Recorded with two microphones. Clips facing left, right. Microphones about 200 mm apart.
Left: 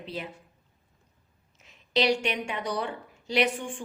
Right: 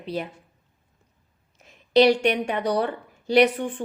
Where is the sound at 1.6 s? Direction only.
50° right (ahead or behind).